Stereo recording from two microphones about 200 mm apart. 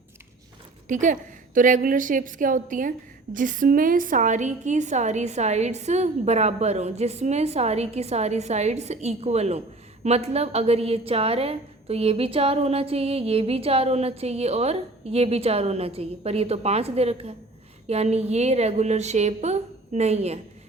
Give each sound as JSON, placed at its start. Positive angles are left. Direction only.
{"t": 1.0, "sound": "a woman's voice", "side_deg": -40}